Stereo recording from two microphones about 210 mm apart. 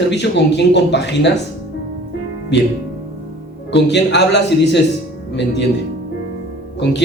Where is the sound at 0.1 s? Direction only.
55° left (ahead or behind).